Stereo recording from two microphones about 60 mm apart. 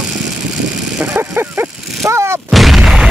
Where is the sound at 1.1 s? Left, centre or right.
Right.